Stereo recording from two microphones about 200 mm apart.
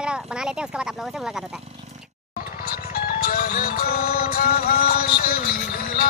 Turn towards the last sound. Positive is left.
turn(degrees=45)  # may be behind; listen again after turning